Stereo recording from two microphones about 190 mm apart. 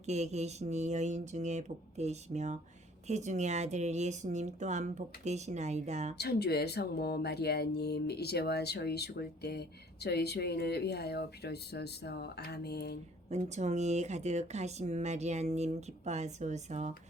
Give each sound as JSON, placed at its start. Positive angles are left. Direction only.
{"t": 0.0, "sound": "speech", "side_deg": -35}
{"t": 6.1, "sound": "speech", "side_deg": 55}
{"t": 13.3, "sound": "speech", "side_deg": -35}